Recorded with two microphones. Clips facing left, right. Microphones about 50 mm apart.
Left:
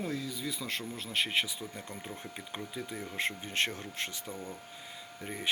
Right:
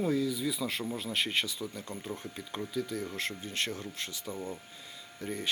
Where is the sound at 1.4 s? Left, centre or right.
Left.